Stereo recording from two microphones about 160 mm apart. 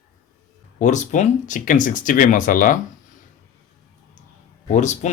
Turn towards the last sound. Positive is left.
turn(degrees=45)  # may be behind; listen again after turning